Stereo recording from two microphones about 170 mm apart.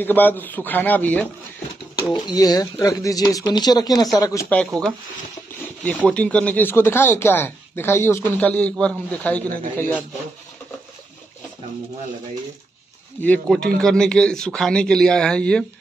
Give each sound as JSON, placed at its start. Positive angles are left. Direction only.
{"t": 0.0, "sound": "speech", "side_deg": 10}
{"t": 2.1, "sound": "speech", "side_deg": 20}
{"t": 4.5, "sound": "a man's voice", "side_deg": 5}
{"t": 6.0, "sound": "speech", "side_deg": 5}
{"t": 13.2, "sound": "a man's voice", "side_deg": 5}